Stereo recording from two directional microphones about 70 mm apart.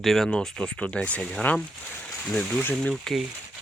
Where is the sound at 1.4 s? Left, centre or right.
Left.